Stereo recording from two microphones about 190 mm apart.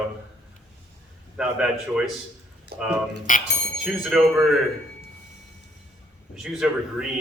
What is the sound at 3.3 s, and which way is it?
Speech, 45° left (ahead or behind).